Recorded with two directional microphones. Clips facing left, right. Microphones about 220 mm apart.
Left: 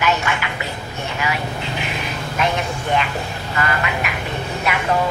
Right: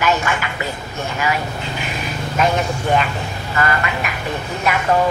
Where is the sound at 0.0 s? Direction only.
45° right (ahead or behind).